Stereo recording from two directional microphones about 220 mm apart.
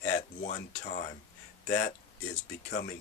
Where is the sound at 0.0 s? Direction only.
35° left (ahead or behind).